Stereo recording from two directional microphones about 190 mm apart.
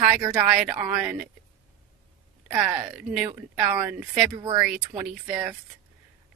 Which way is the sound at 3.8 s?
5° right (ahead or behind).